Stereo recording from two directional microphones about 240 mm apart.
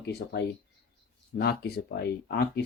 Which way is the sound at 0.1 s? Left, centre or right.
Left.